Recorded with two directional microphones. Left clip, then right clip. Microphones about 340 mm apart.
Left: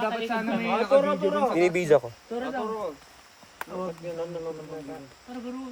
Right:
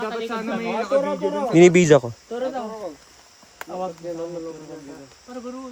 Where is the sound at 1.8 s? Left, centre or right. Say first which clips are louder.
Right 6 dB; right.